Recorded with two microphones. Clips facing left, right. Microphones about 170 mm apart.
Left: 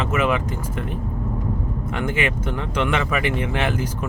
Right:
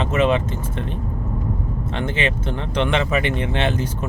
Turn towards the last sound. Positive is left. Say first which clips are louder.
# right 1 dB
turn(degrees=-25)  # may be behind; listen again after turning